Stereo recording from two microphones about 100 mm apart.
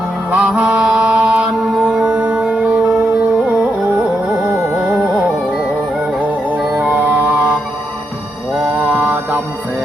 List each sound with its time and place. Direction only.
0.3 s mantra: 10° right (ahead or behind)
2.4 s carnatic music: 10° right (ahead or behind)
6.1 s music: 10° right (ahead or behind)
8.6 s music: 15° right (ahead or behind)